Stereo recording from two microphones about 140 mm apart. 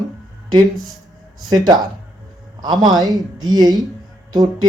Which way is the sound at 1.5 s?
30° right (ahead or behind).